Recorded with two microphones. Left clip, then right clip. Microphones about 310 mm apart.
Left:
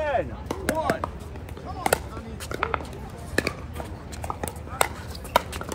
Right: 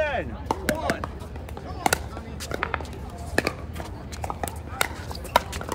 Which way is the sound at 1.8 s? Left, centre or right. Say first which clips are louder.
Even; right.